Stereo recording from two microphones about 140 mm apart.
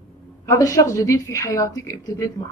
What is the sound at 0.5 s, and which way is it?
A woman's voice, 25° left (ahead or behind).